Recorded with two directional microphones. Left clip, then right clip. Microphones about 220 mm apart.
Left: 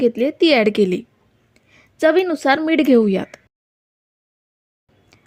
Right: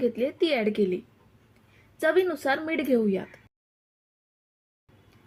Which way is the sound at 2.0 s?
40° left (ahead or behind).